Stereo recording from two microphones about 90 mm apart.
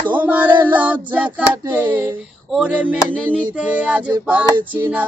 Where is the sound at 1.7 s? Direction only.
20° right (ahead or behind).